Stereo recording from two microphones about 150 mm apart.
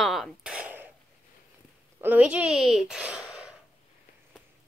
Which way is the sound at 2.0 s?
10° right (ahead or behind).